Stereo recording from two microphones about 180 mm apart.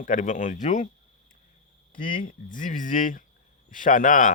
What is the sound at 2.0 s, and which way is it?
Speech, 50° left (ahead or behind).